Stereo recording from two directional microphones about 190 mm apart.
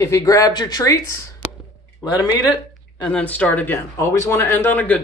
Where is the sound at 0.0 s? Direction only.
15° left (ahead or behind).